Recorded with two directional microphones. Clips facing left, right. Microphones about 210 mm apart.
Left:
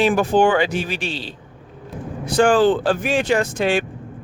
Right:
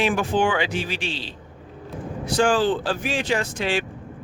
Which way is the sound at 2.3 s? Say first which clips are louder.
Left 5 dB; 55° left (ahead or behind).